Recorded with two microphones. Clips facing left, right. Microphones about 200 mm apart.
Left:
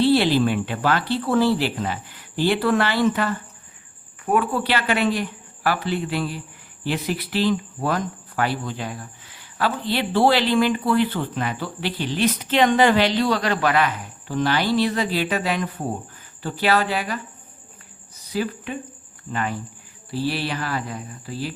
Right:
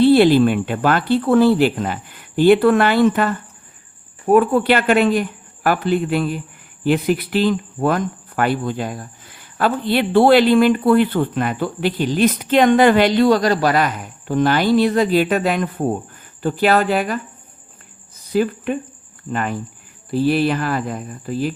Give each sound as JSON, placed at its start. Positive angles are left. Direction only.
{"t": 0.0, "sound": "speech", "side_deg": -55}
{"t": 18.3, "sound": "speech", "side_deg": -50}